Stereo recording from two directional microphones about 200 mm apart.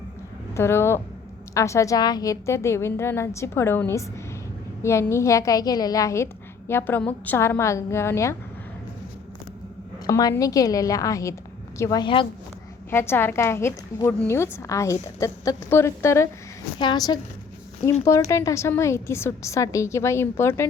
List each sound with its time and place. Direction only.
0.5 s a woman's voice: 10° left (ahead or behind)
10.1 s a woman's voice: 15° left (ahead or behind)
12.9 s a woman's voice: 10° left (ahead or behind)